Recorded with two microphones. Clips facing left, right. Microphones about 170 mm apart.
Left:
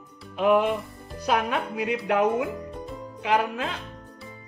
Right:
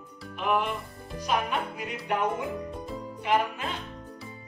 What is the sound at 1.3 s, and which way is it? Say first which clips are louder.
Speech: left 4 dB; 90° left.